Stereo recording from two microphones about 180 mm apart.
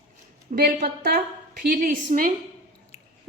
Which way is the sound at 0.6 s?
55° right (ahead or behind).